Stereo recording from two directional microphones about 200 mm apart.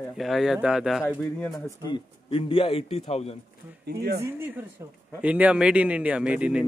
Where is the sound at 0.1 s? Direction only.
Centre (ahead or behind).